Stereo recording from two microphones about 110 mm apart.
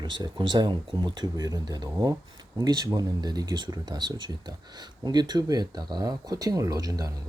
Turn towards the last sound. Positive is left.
turn(degrees=-35)  # may be behind; listen again after turning